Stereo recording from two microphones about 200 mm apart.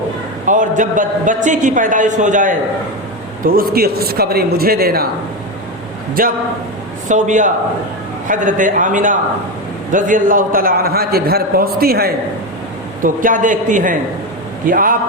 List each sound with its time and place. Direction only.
0.4 s a man's voice: 40° right (ahead or behind)
7.1 s a man's voice: 40° right (ahead or behind)